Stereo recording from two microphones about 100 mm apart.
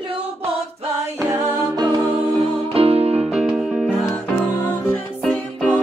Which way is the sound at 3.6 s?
Centre (ahead or behind).